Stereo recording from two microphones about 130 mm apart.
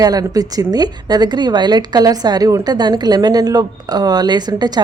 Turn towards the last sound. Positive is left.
turn(degrees=-30)  # may be behind; listen again after turning